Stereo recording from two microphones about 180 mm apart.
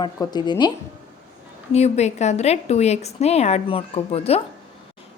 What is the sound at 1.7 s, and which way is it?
A woman's voice, 35° left (ahead or behind).